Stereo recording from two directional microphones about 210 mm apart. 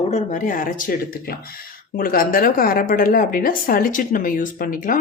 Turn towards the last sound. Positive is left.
turn(degrees=40)  # may be behind; listen again after turning